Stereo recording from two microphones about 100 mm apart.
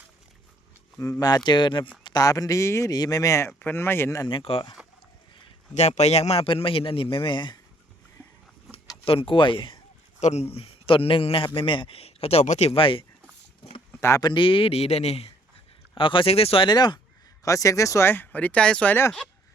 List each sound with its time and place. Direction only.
1.5 s speech: 50° left (ahead or behind)
2.0 s speech: 40° left (ahead or behind); by 4.2 s 25° left (ahead or behind)
4.3 s speech: 65° left (ahead or behind)
5.8 s a man's voice: 90° left; by 7.6 s 50° left (ahead or behind)
9.0 s speech: 60° left (ahead or behind)
10.5 s a man's voice: 70° left (ahead or behind)
13.9 s a sound: 25° left (ahead or behind)
14.2 s speech: 50° left (ahead or behind); by 15.3 s 90° left
16.0 s a man's voice: 60° left (ahead or behind); by 16.6 s 75° left (ahead or behind)
16.6 s speech: 50° left (ahead or behind)
17.4 s speech: 35° left (ahead or behind); by 18.9 s 10° left (ahead or behind)